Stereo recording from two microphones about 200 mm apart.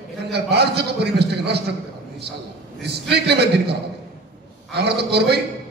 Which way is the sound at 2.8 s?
55° right (ahead or behind).